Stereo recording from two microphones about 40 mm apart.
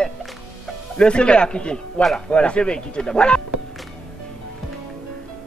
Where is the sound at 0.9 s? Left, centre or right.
Left.